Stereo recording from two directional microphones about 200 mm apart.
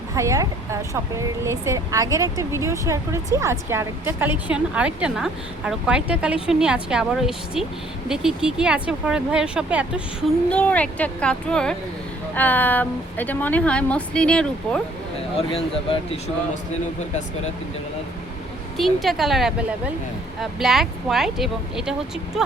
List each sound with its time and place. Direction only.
0.1 s a woman's voice: 15° right (ahead or behind)
10.5 s speech: 5° left (ahead or behind)
15.4 s speech: 30° left (ahead or behind)
18.8 s a woman's voice: centre (ahead or behind)